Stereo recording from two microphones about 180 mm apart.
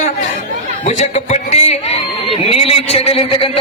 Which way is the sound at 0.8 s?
40° left (ahead or behind).